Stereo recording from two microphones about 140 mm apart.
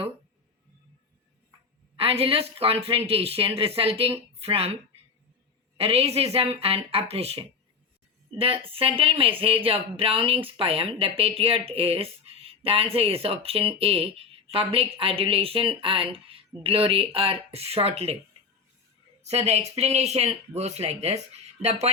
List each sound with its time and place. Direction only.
2.0 s speech: 40° right (ahead or behind)
19.2 s speech: 50° right (ahead or behind)